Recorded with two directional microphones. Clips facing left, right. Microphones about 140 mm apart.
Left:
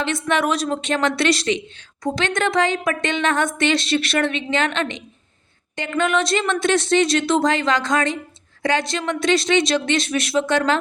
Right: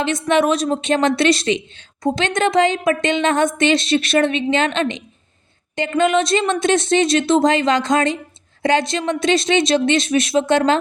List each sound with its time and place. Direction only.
0.0 s speech: 20° right (ahead or behind)